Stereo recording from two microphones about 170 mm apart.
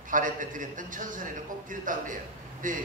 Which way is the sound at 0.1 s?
50° right (ahead or behind).